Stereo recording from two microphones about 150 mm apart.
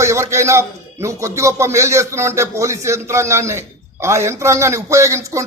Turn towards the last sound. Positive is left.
turn(degrees=-20)  # may be behind; listen again after turning